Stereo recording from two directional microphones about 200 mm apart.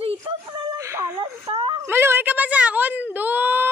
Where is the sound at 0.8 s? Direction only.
15° right (ahead or behind).